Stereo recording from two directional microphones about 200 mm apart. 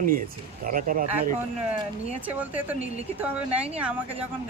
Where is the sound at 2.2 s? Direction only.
10° right (ahead or behind).